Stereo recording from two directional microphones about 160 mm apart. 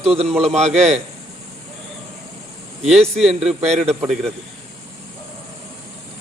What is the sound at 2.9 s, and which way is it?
Speech, centre (ahead or behind).